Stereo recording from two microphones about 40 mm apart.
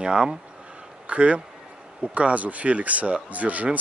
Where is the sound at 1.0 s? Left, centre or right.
Right.